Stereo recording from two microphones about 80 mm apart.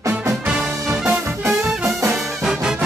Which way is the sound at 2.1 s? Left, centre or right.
Centre.